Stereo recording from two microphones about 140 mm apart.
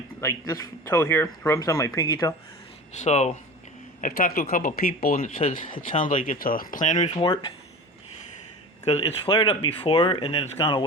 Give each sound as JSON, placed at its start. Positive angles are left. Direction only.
{"t": 0.2, "sound": "speech", "side_deg": 25}
{"t": 2.9, "sound": "speech", "side_deg": 55}
{"t": 4.0, "sound": "speech", "side_deg": 85}
{"t": 5.4, "sound": "speech", "side_deg": 65}
{"t": 7.2, "sound": "speech", "side_deg": 35}
{"t": 8.8, "sound": "speech", "side_deg": 45}